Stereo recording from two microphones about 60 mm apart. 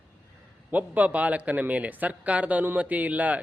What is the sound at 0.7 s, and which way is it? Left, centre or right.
Speech, right.